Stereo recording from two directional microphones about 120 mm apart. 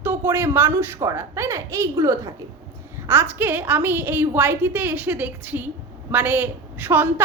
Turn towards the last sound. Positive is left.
turn(degrees=-15)  # may be behind; listen again after turning